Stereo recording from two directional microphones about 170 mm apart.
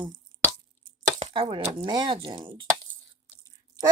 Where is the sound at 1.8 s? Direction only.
30° right (ahead or behind).